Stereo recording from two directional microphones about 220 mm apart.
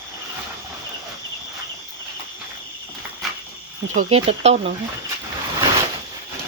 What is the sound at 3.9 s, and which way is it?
Speech, 30° right (ahead or behind).